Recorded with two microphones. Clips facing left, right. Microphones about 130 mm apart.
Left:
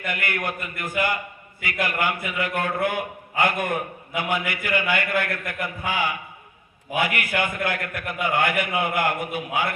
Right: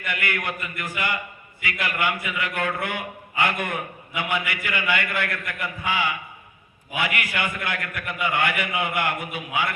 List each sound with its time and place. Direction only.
0.0 s a man's voice: 45° left (ahead or behind)